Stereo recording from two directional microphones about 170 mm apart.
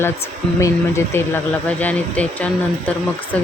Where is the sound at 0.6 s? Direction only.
15° left (ahead or behind).